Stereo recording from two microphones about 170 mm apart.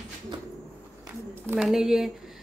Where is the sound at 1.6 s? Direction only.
Centre (ahead or behind).